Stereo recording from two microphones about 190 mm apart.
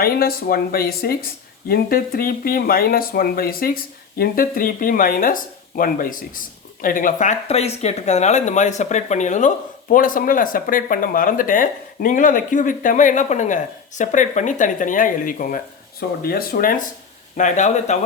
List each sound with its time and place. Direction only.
0.0 s speech: 50° left (ahead or behind)